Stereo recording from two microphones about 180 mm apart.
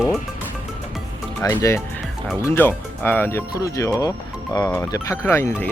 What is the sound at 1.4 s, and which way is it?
Speech, 15° left (ahead or behind).